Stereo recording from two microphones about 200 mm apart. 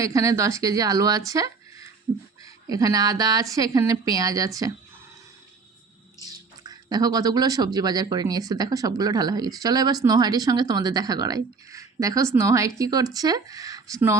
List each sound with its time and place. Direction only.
0.0 s a woman's voice: 15° right (ahead or behind)
6.1 s speech: 20° right (ahead or behind)